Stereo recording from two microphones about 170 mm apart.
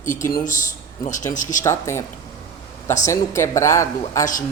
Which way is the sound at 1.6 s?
15° left (ahead or behind).